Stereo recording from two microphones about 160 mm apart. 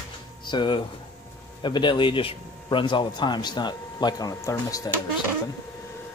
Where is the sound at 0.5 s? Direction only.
30° left (ahead or behind).